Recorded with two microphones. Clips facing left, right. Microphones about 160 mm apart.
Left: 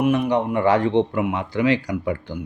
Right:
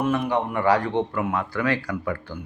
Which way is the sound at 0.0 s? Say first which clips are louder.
Left 4 dB; 20° left (ahead or behind).